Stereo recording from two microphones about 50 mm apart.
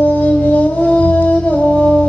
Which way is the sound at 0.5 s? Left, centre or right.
Left.